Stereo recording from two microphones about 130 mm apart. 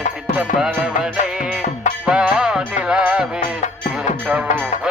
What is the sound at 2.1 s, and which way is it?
Music, 5° right (ahead or behind).